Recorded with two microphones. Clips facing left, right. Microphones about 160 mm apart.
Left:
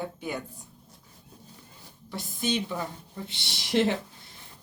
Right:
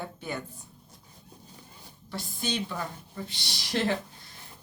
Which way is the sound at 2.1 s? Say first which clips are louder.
Left 3 dB; 20° left (ahead or behind).